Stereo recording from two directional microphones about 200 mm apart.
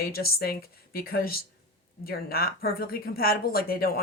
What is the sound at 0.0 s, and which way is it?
Speech, 50° left (ahead or behind).